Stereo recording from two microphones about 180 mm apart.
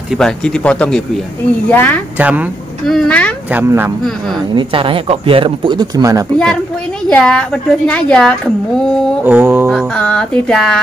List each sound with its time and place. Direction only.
0.2 s a woman's voice: 5° left (ahead or behind)
2.1 s speech: 10° right (ahead or behind)
2.9 s speech: 5° left (ahead or behind)
3.5 s speech: 10° right (ahead or behind)
4.6 s speech: 30° right (ahead or behind)
6.3 s a woman's voice: 5° left (ahead or behind)
9.2 s speech: 10° right (ahead or behind)
9.9 s a woman's voice: 5° left (ahead or behind)